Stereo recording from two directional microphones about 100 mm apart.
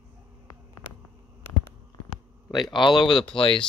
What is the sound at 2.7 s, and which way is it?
Speech, 50° left (ahead or behind).